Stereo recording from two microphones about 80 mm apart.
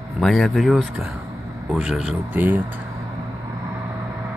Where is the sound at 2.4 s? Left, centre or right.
Right.